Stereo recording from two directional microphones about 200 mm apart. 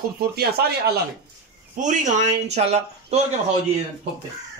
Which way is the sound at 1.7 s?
40° right (ahead or behind).